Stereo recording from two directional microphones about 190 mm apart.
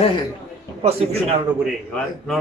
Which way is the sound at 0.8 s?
30° right (ahead or behind).